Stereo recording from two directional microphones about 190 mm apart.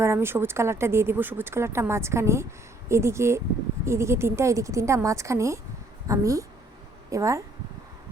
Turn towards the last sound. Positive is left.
turn(degrees=-15)  # may be behind; listen again after turning